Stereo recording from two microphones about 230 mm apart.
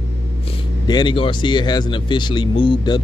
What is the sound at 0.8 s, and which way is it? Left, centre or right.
Speech, centre.